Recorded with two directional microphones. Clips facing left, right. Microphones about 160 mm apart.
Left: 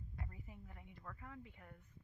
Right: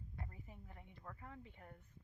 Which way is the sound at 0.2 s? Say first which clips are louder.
Left 1 dB; 30° right (ahead or behind).